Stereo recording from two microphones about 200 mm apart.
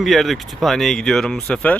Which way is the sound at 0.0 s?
Centre (ahead or behind).